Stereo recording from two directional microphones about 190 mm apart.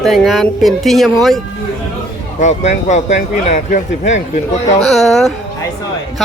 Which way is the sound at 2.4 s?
40° left (ahead or behind).